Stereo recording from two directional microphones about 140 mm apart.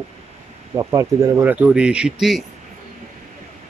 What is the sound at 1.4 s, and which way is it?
Speech, 10° right (ahead or behind).